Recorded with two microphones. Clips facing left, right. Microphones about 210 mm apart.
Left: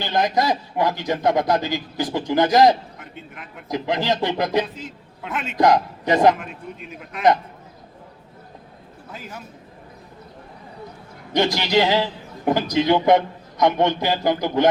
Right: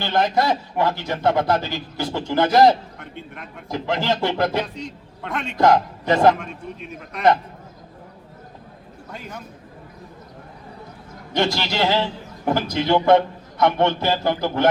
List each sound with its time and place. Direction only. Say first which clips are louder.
0.0 s a man's voice: right 1 dB; 15° left (ahead or behind)
3.0 s speech: right 2 dB; centre (ahead or behind)
3.7 s a man's voice: left 1 dB; 15° left (ahead or behind)
4.6 s a man's voice: right 2 dB; 5° left (ahead or behind)
5.5 s a man's voice: even; 15° left (ahead or behind)
6.4 s speech: right 1 dB; centre (ahead or behind)
9.1 s speech: right 1 dB; 5° left (ahead or behind)
11.3 s a man's voice: left 3 dB; 20° left (ahead or behind)